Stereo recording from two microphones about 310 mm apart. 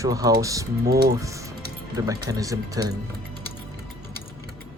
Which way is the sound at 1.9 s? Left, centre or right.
Centre.